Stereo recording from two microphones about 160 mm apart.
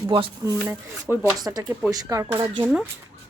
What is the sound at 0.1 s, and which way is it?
Speech, 30° right (ahead or behind).